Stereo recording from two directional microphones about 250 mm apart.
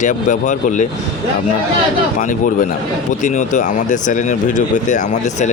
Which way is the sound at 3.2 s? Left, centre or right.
Left.